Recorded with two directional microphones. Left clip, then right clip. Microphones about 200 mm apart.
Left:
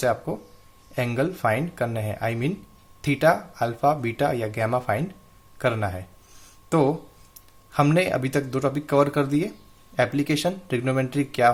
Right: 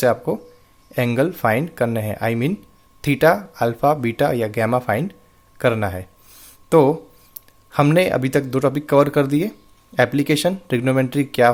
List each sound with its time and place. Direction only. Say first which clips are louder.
0.0 s speech: right 6 dB; 35° right (ahead or behind)